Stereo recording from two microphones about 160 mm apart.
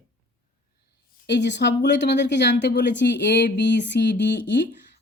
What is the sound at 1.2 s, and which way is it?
Speech, 90° left.